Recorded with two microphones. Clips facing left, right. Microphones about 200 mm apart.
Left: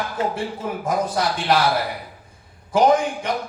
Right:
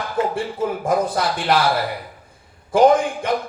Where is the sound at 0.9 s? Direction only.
55° right (ahead or behind).